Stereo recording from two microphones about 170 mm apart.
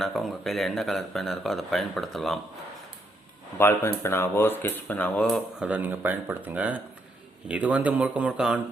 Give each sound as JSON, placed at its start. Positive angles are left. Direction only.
{"t": 0.0, "sound": "speech", "side_deg": 0}
{"t": 3.6, "sound": "speech", "side_deg": 15}